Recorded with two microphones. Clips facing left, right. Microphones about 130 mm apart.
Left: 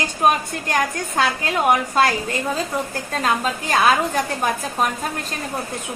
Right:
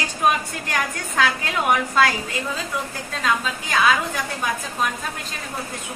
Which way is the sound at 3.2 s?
45° left (ahead or behind).